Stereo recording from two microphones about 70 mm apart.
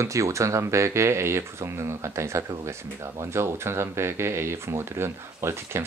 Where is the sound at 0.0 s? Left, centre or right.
Right.